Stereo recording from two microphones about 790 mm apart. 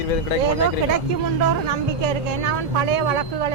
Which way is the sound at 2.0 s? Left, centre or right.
Right.